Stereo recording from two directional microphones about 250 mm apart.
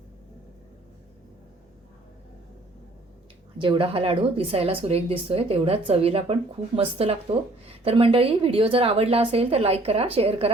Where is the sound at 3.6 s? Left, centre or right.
Centre.